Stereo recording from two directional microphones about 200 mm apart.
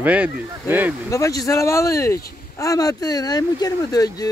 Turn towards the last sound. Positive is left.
turn(degrees=20)  # may be behind; listen again after turning